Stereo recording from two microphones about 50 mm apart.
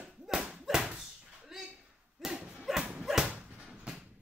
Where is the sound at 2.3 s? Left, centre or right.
Centre.